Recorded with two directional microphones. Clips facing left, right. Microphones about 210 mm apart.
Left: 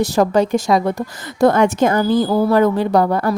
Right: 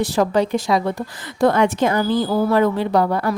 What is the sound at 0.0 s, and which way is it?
A woman's voice, 45° left (ahead or behind).